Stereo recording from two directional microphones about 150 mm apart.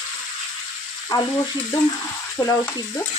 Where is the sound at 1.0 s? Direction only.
25° left (ahead or behind).